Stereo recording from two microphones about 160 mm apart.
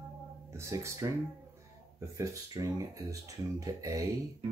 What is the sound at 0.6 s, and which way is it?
Speech, 20° right (ahead or behind).